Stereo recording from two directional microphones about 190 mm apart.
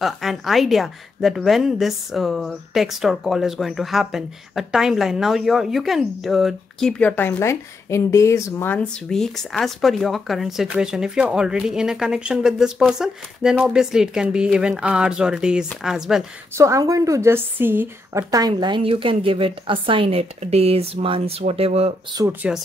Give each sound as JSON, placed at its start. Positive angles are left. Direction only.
{"t": 0.0, "sound": "speech", "side_deg": 0}
{"t": 16.5, "sound": "a woman's voice", "side_deg": -15}
{"t": 22.2, "sound": "speech", "side_deg": -5}